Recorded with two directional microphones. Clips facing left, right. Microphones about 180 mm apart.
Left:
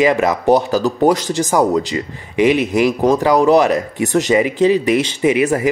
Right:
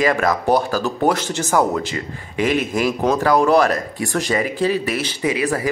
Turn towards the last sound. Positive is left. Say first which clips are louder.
# left 6 dB
turn(degrees=20)  # may be behind; listen again after turning